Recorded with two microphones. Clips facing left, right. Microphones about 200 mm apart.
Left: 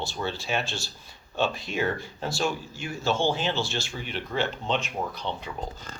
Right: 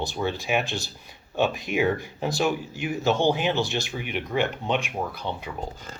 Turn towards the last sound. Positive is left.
turn(degrees=-15)  # may be behind; listen again after turning